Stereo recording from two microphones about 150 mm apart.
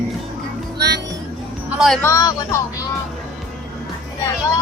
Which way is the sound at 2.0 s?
20° left (ahead or behind).